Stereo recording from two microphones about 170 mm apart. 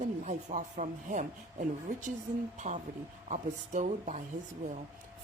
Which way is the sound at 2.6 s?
45° right (ahead or behind).